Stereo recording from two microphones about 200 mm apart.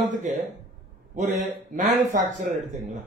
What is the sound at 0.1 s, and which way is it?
Speech, 35° right (ahead or behind).